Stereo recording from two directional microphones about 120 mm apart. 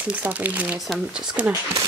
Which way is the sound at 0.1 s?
10° right (ahead or behind).